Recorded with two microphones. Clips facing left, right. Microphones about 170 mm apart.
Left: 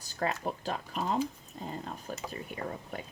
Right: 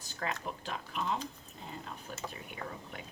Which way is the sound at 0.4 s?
40° left (ahead or behind).